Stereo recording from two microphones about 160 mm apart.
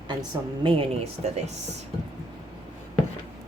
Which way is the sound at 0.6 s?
40° right (ahead or behind).